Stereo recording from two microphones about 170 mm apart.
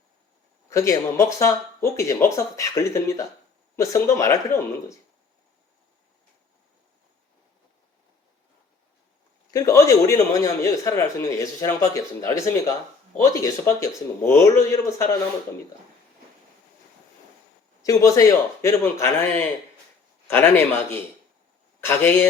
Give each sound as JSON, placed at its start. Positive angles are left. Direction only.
{"t": 0.7, "sound": "speech", "side_deg": 15}
{"t": 9.5, "sound": "a man's voice", "side_deg": 20}
{"t": 17.8, "sound": "speech", "side_deg": 20}